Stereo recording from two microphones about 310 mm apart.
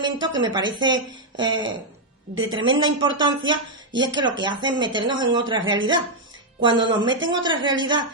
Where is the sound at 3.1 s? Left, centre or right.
Centre.